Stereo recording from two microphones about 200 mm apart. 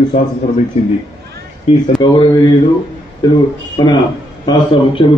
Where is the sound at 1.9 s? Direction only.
20° left (ahead or behind).